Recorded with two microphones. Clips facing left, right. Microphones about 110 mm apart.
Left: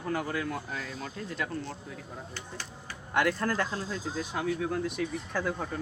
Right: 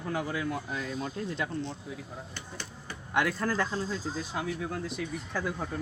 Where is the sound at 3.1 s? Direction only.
10° right (ahead or behind).